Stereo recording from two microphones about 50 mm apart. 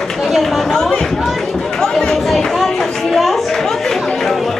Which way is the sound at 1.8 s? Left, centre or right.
Centre.